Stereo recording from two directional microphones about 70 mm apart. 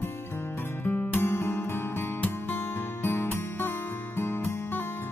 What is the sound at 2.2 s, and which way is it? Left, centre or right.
Music, left.